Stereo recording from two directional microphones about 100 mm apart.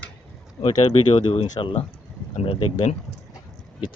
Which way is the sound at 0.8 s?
80° left.